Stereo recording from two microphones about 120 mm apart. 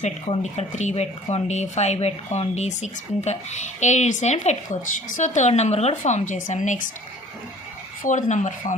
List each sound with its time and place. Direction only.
0.0 s a woman's voice: 70° left (ahead or behind); by 6.8 s 90° left
8.0 s speech: 90° left